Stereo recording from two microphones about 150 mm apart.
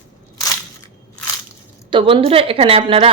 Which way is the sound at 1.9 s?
35° right (ahead or behind).